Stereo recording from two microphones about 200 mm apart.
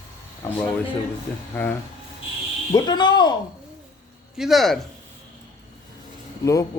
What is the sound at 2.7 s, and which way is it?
Speech, 20° left (ahead or behind).